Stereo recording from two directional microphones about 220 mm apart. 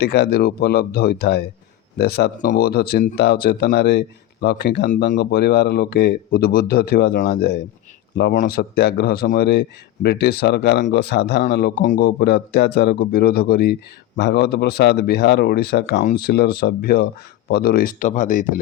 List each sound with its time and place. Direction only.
0.0 s speech: 50° left (ahead or behind)